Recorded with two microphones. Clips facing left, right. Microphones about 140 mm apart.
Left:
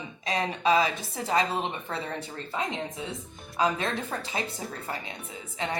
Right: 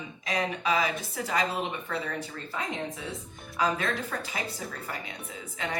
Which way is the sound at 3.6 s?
25° left (ahead or behind).